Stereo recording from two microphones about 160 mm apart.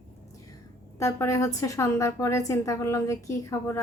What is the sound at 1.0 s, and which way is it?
A woman's voice, 20° left (ahead or behind).